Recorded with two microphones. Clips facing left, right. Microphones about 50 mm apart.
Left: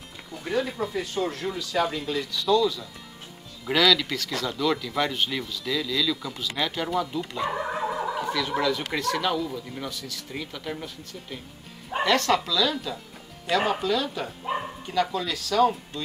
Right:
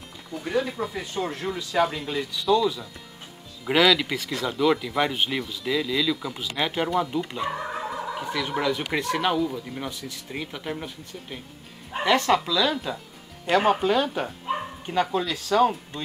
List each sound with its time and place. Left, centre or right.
0.3 s speech: centre
7.4 s turkey: centre
8.2 s speech: centre
9.8 s speech: right
13.7 s speech: right
14.5 s bow-wow: centre
14.9 s speech: right